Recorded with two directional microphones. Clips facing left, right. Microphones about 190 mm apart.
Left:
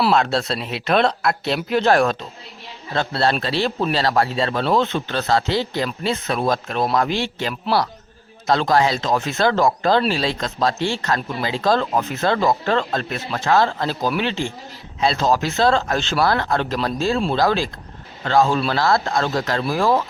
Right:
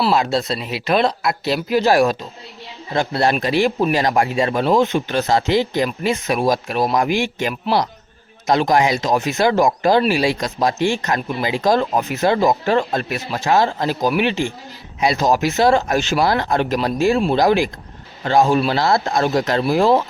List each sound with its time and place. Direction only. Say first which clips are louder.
0.1 s speech: right 1 dB; centre (ahead or behind); by 20.1 s 20° right (ahead or behind)